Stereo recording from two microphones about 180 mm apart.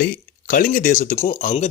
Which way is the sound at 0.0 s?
50° left (ahead or behind).